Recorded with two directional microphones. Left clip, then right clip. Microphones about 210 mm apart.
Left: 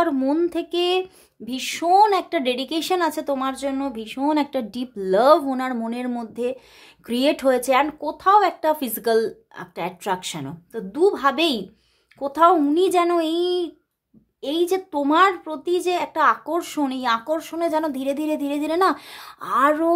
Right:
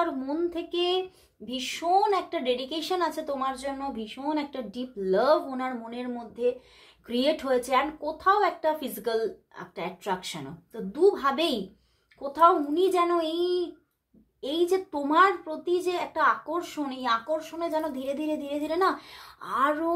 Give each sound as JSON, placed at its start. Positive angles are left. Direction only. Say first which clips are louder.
{"t": 0.0, "sound": "speech", "louder": "left 8 dB", "side_deg": 45}